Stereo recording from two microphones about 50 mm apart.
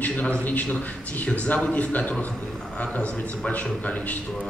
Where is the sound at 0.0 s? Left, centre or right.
Left.